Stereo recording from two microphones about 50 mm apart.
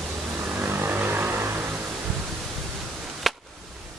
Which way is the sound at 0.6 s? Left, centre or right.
Right.